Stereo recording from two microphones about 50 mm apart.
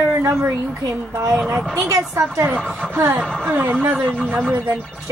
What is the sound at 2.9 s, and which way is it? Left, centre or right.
Speech, right.